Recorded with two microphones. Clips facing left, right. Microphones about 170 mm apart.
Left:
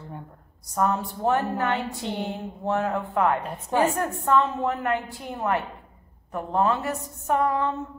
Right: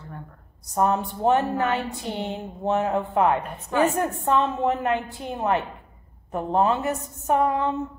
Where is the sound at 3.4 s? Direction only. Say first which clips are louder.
Even; 30° left (ahead or behind).